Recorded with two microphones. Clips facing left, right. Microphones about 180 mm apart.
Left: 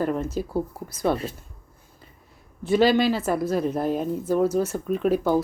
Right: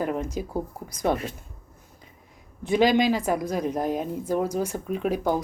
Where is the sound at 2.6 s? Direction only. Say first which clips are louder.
Left 1 dB; 15° right (ahead or behind).